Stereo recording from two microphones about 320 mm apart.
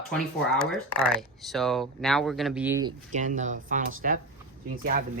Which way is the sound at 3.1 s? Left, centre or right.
Right.